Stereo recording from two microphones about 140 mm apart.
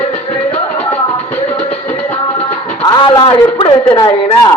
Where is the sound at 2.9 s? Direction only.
35° left (ahead or behind).